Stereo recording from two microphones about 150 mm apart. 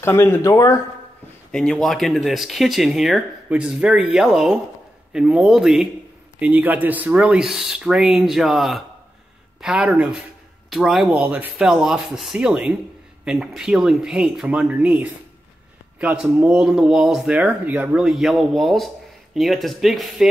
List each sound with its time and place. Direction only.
0.0 s speech: 15° left (ahead or behind)
1.5 s speech: 5° left (ahead or behind)